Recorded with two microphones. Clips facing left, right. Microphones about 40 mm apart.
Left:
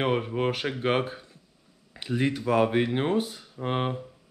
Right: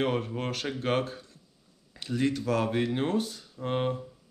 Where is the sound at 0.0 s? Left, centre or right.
Left.